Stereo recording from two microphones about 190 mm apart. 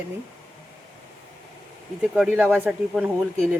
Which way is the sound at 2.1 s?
5° right (ahead or behind).